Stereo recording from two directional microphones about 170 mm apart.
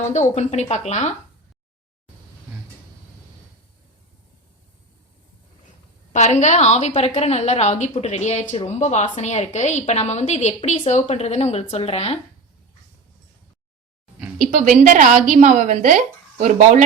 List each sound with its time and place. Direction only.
0.0 s speech: 45° left (ahead or behind)
6.1 s a woman's voice: 40° left (ahead or behind)
14.3 s a woman's voice: 45° right (ahead or behind)